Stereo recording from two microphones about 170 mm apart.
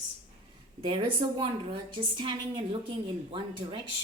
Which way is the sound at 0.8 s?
30° right (ahead or behind).